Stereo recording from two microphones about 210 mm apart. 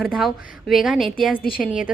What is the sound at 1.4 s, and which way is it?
Speech, 45° left (ahead or behind).